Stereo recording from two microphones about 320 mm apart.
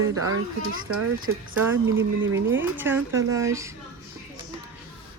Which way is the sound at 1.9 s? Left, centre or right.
Right.